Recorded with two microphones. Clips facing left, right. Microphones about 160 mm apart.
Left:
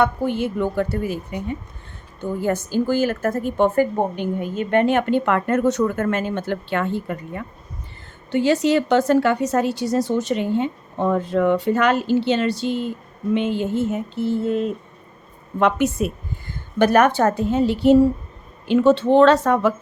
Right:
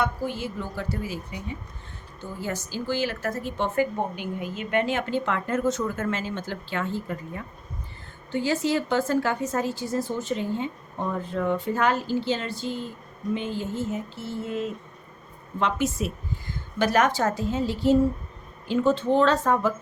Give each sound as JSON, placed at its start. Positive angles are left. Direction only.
{"t": 0.0, "sound": "a woman's voice", "side_deg": 60}
{"t": 8.3, "sound": "a woman's voice", "side_deg": 75}
{"t": 18.7, "sound": "a woman's voice", "side_deg": 80}